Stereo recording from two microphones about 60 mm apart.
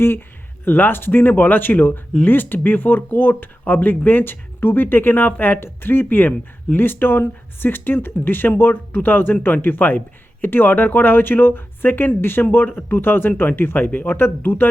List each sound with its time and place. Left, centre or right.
0.6 s speech: left